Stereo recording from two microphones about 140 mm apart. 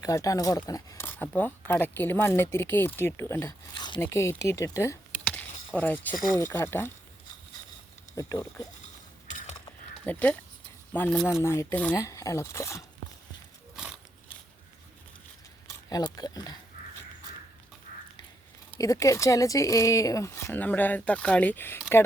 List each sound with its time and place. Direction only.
0.0 s speech: 25° left (ahead or behind)
3.8 s a sound: 30° left (ahead or behind)
4.0 s speech: 20° left (ahead or behind)
5.2 s a sound: 10° left (ahead or behind)
6.2 s speech: 25° left (ahead or behind)
6.5 s speech: 15° left (ahead or behind)
8.1 s speech: 25° left (ahead or behind)
10.1 s speech: 10° left (ahead or behind)
11.9 s speech: 20° left (ahead or behind)
15.6 s speech: 30° left (ahead or behind)
18.8 s speech: 25° left (ahead or behind)